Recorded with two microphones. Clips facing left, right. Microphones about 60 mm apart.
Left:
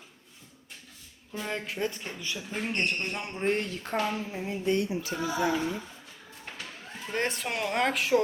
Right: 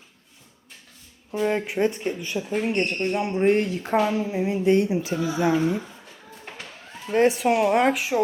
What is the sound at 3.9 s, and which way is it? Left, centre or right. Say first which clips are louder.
Speech: right 8 dB; right.